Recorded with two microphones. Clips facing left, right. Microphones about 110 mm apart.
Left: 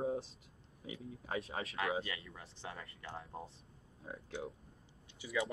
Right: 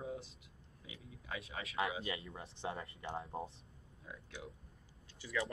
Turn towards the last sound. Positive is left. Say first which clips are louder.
# left 2 dB
turn(degrees=15)  # may be behind; listen again after turning